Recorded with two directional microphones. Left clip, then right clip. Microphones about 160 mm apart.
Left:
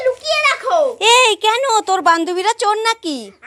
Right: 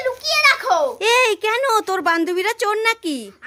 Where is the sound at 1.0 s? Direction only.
Centre (ahead or behind).